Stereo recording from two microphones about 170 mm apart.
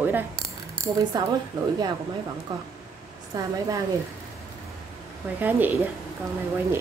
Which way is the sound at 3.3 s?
20° right (ahead or behind).